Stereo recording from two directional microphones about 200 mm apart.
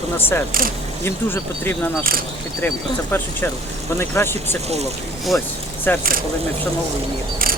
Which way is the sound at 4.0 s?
10° left (ahead or behind).